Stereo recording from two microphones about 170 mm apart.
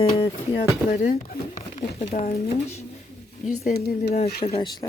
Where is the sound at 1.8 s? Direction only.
35° left (ahead or behind).